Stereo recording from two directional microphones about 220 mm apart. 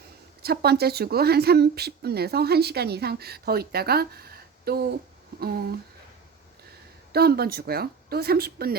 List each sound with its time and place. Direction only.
0.4 s speech: 45° right (ahead or behind)
7.1 s speech: 45° right (ahead or behind)